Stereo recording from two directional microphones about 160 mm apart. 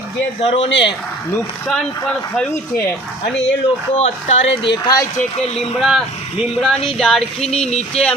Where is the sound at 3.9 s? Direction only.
45° left (ahead or behind).